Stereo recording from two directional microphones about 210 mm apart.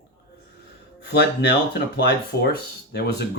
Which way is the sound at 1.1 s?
50° left (ahead or behind).